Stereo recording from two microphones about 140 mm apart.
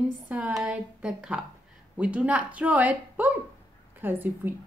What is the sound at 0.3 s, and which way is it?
Speech, 5° right (ahead or behind).